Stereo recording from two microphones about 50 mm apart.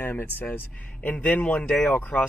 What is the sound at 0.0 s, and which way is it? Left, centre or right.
Speech, left.